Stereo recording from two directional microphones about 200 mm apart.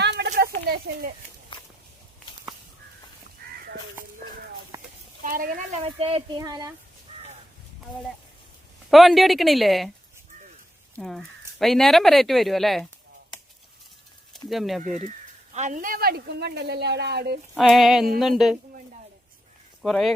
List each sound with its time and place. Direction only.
0.0 s a sound: 60° right (ahead or behind)
5.2 s speech: 40° right (ahead or behind)
5.8 s speech: 30° right (ahead or behind)
8.9 s speech: centre (ahead or behind)
10.9 s speech: centre (ahead or behind)
14.5 s speech: centre (ahead or behind)
14.8 s a woman's voice: 40° right (ahead or behind)
17.5 s speech: centre (ahead or behind)
19.8 s speech: centre (ahead or behind)